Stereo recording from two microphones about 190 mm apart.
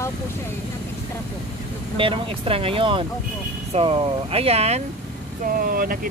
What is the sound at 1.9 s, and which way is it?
Speech, 30° right (ahead or behind).